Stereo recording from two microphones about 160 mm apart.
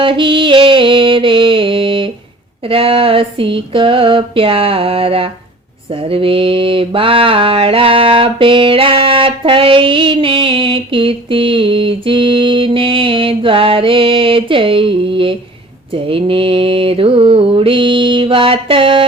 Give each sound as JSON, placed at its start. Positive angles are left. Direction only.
{"t": 0.0, "sound": "mantra", "side_deg": -30}